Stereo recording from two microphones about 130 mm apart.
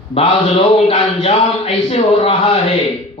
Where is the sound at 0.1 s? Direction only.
50° left (ahead or behind).